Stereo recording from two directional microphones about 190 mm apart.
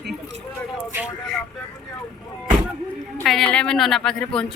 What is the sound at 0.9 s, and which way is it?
Speech, centre (ahead or behind).